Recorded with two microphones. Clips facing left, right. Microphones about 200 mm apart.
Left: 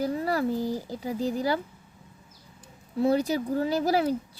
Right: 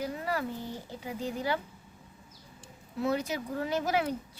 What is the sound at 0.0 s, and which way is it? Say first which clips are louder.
Speech: left 7 dB; 35° left (ahead or behind).